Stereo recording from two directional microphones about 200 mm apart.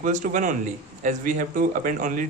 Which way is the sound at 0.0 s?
40° right (ahead or behind).